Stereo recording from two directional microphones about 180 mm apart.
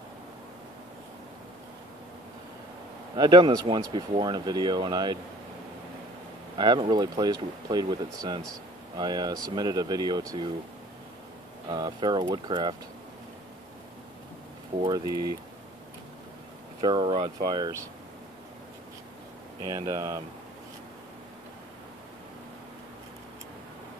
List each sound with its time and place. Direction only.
3.2 s speech: 25° right (ahead or behind)
6.5 s speech: 25° right (ahead or behind)
11.7 s speech: 25° right (ahead or behind)
14.8 s speech: 20° right (ahead or behind)
16.8 s speech: 25° right (ahead or behind)
19.6 s speech: 20° right (ahead or behind)